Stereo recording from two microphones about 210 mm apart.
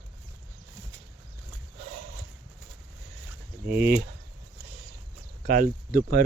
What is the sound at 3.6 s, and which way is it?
Speech, 50° right (ahead or behind).